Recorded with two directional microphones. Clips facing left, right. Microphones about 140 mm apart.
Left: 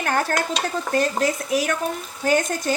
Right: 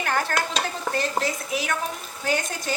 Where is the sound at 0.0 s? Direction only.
45° left (ahead or behind).